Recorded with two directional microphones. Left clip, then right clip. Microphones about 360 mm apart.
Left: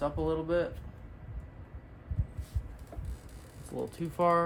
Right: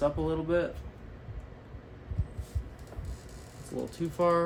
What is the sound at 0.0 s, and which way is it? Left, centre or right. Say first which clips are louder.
Speech: right 2 dB; centre.